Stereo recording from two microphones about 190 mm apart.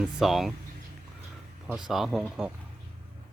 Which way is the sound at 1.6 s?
Centre (ahead or behind).